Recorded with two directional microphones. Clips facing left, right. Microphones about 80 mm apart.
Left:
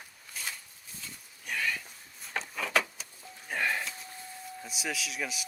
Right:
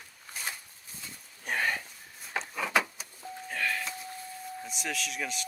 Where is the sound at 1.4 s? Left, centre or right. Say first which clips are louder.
Right 3 dB; right.